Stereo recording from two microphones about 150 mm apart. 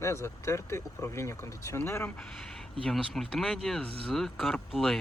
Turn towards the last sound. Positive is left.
turn(degrees=5)  # may be behind; listen again after turning